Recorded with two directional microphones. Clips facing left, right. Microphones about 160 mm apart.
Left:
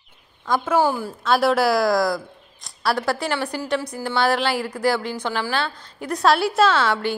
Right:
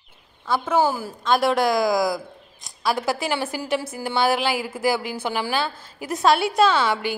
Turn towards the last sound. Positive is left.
turn(degrees=0)  # may be behind; listen again after turning